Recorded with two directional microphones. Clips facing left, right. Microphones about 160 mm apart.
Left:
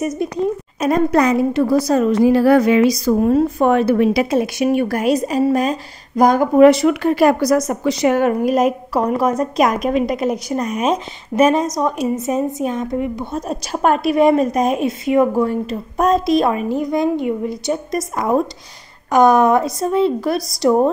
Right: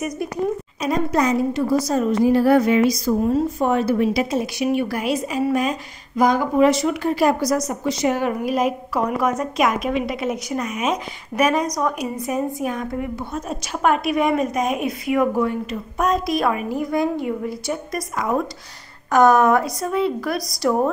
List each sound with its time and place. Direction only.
0.0 s a woman's voice: 25° left (ahead or behind)
0.7 s a woman's voice: 55° left (ahead or behind)
4.6 s a woman's voice: 45° left (ahead or behind); by 13.4 s 20° left (ahead or behind)
13.5 s a woman's voice: 40° left (ahead or behind); by 20.9 s 20° left (ahead or behind)